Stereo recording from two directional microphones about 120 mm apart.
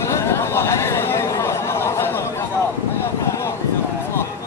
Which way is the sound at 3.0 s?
25° left (ahead or behind).